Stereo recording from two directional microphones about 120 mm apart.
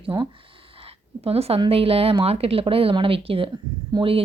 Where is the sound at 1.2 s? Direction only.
55° right (ahead or behind).